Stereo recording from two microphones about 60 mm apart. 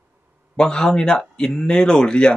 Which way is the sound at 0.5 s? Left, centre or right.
Centre.